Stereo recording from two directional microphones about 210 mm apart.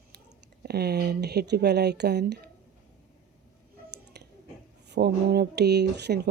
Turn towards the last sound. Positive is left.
turn(degrees=-50)  # may be behind; listen again after turning